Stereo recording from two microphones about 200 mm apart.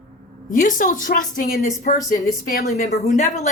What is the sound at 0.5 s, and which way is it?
A woman's voice, 40° left (ahead or behind).